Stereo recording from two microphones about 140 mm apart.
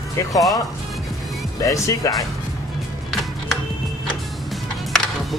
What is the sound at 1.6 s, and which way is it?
Speech, 20° left (ahead or behind).